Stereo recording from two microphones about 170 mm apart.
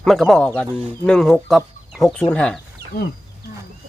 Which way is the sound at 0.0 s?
Centre (ahead or behind).